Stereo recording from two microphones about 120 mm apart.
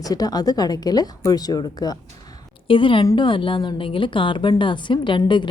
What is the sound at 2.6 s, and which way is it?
Speech, 45° left (ahead or behind).